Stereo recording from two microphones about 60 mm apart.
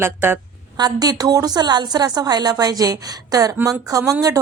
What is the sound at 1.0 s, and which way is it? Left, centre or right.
A woman's voice, right.